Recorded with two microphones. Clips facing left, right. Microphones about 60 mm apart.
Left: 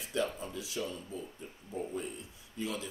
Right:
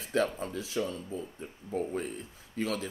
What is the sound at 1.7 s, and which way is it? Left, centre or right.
Speech, right.